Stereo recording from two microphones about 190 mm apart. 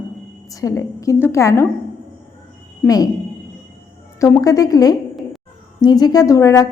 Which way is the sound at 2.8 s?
20° left (ahead or behind).